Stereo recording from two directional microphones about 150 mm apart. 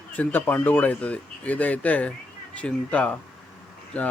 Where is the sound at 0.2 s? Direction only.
10° left (ahead or behind).